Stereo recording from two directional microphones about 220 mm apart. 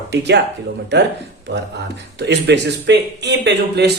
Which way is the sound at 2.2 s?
50° right (ahead or behind).